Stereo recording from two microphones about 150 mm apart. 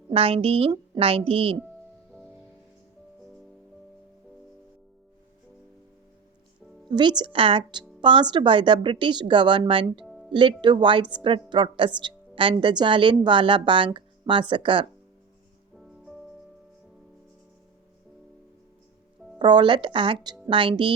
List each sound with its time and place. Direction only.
0.1 s speech: 40° right (ahead or behind)
6.9 s speech: 30° right (ahead or behind)
10.0 s music: centre (ahead or behind)
10.3 s speech: 30° right (ahead or behind)
19.4 s speech: 30° right (ahead or behind)